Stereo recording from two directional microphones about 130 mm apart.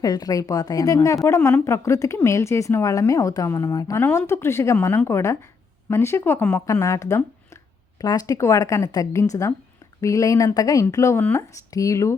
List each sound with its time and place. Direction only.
0.0 s a woman's voice: 30° left (ahead or behind)